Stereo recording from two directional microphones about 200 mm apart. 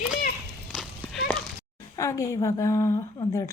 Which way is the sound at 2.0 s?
15° left (ahead or behind).